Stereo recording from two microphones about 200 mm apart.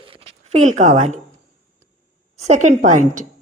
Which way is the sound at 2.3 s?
35° right (ahead or behind).